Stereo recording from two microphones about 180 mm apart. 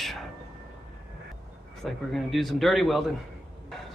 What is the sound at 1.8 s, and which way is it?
Speech, centre (ahead or behind).